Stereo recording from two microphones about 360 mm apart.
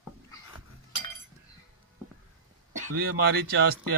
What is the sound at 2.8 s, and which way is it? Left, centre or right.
Speech, right.